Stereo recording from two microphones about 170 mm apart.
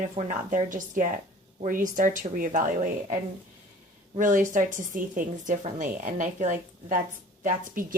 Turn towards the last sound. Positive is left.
turn(degrees=-55)  # may be behind; listen again after turning